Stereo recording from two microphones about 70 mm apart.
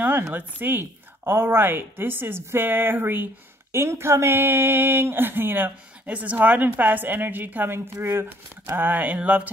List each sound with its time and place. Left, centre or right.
0.3 s speech: right